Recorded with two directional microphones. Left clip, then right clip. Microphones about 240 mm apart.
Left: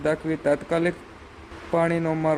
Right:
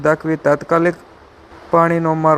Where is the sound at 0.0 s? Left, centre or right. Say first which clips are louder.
Right 8 dB; centre.